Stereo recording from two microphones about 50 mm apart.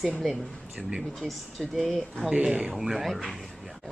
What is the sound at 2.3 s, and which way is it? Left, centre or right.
Speech, centre.